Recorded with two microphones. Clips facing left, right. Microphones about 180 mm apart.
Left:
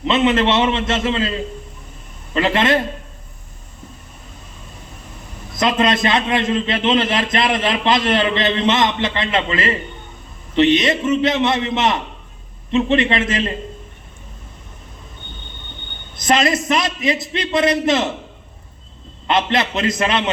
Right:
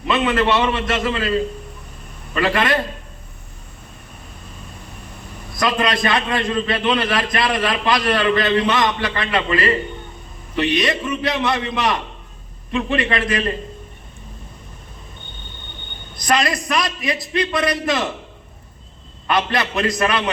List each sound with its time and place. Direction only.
0.1 s a man's voice: 25° left (ahead or behind)
2.3 s a man's voice: 25° left (ahead or behind)
5.5 s a man's voice: 25° left (ahead or behind)
16.1 s a man's voice: 25° left (ahead or behind)
19.3 s a man's voice: 25° left (ahead or behind)